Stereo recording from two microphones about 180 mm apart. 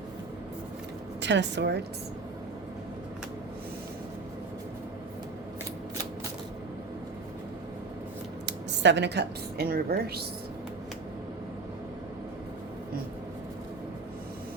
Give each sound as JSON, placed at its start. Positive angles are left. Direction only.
{"t": 1.2, "sound": "a woman's voice", "side_deg": -80}
{"t": 8.4, "sound": "speech", "side_deg": -75}